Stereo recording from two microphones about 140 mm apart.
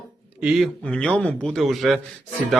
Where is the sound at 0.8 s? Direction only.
10° left (ahead or behind).